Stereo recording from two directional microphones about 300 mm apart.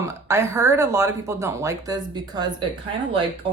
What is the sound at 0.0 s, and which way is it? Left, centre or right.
Speech, centre.